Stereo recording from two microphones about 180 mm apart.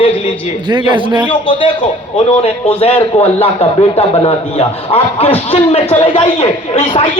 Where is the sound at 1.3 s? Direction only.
30° left (ahead or behind).